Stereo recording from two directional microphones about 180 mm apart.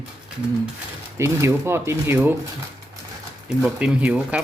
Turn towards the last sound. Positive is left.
turn(degrees=-5)  # may be behind; listen again after turning